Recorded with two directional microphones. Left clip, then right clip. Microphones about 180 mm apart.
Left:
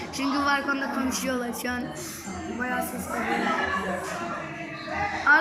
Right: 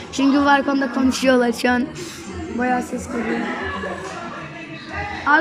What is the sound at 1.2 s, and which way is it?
Speech, 50° right (ahead or behind).